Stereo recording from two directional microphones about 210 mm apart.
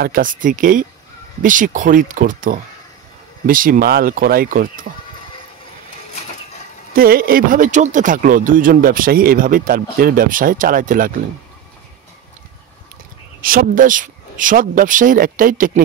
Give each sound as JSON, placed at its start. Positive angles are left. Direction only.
{"t": 0.0, "sound": "speech", "side_deg": -40}
{"t": 6.9, "sound": "speech", "side_deg": -45}
{"t": 13.4, "sound": "speech", "side_deg": -40}